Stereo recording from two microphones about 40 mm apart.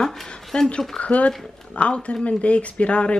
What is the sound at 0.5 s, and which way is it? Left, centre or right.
Speech, left.